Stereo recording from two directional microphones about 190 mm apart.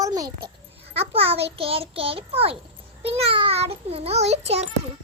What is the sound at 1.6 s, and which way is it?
Child singing, 30° right (ahead or behind).